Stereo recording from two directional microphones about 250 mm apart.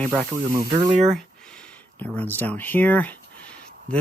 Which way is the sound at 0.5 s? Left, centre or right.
Centre.